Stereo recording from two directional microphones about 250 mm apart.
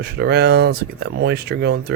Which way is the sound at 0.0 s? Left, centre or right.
Right.